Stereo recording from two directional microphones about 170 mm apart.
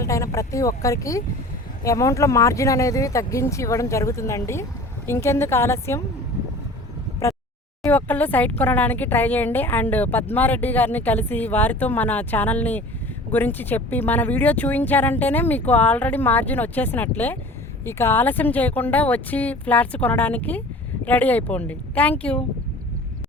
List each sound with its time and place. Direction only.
0.0 s speech: 15° left (ahead or behind)
7.8 s speech: 10° left (ahead or behind)